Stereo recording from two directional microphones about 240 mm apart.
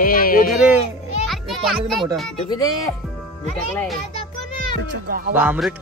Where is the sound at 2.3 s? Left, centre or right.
Centre.